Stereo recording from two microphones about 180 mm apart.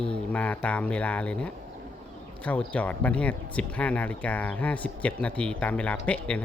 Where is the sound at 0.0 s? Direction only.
5° left (ahead or behind).